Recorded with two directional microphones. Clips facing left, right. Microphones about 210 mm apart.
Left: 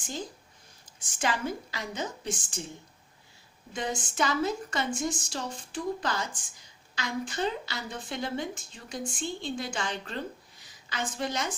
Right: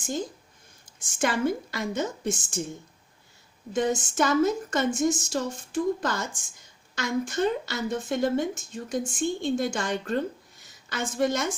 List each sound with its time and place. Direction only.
1.0 s a woman's voice: 50° right (ahead or behind)
3.7 s a woman's voice: 45° right (ahead or behind)